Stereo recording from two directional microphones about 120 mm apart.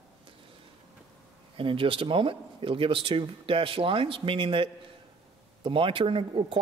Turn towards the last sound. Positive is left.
turn(degrees=-45)  # may be behind; listen again after turning